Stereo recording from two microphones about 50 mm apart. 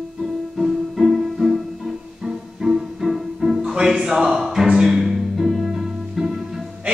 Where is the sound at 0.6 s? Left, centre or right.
Centre.